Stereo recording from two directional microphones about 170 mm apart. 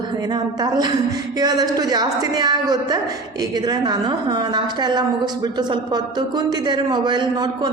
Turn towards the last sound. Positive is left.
turn(degrees=-25)  # may be behind; listen again after turning